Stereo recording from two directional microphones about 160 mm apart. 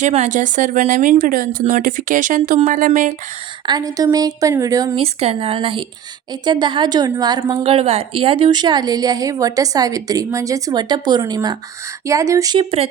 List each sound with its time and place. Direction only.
0.0 s speech: 45° right (ahead or behind)
3.7 s a woman's voice: 25° right (ahead or behind)
4.9 s a woman's voice: 40° right (ahead or behind); by 12.5 s 20° right (ahead or behind)
12.5 s speech: 35° right (ahead or behind)